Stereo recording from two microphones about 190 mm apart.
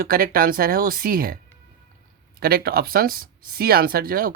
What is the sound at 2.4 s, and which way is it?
Speech, 55° right (ahead or behind).